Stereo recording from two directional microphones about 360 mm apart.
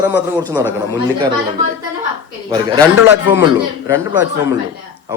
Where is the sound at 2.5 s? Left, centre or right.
Centre.